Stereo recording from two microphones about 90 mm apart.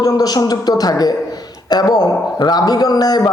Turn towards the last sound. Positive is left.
turn(degrees=45)  # may be behind; listen again after turning